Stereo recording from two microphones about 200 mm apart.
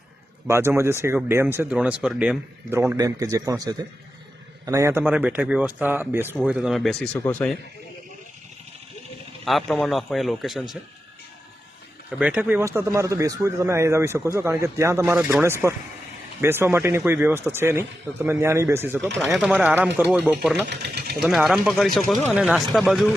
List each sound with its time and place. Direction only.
0.4 s speech: 10° right (ahead or behind); by 7.5 s 10° left (ahead or behind)
9.4 s speech: centre (ahead or behind)
12.2 s speech: 5° right (ahead or behind)
20.7 s speech: 55° right (ahead or behind)
21.2 s speech: centre (ahead or behind)